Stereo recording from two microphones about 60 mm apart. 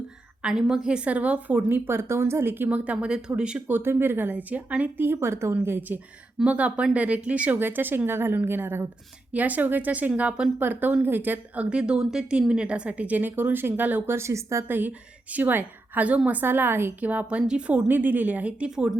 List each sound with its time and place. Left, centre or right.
0.4 s a woman's voice: centre; by 2.6 s right
2.6 s speech: right
3.7 s a woman's voice: right
5.6 s a woman's voice: right
6.4 s a woman's voice: right
7.6 s a woman's voice: right
9.3 s a woman's voice: right
10.6 s a woman's voice: right
14.2 s a woman's voice: right
14.7 s a woman's voice: right
17.0 s a woman's voice: right